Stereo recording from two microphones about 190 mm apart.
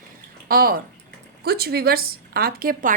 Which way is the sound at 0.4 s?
50° right (ahead or behind).